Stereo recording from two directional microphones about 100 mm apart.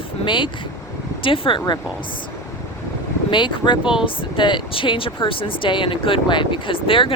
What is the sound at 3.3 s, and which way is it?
Speech, 50° left (ahead or behind).